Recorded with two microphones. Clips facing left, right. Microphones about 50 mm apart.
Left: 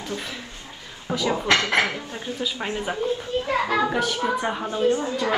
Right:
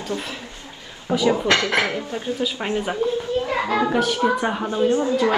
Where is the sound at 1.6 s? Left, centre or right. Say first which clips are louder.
Right 1 dB; left.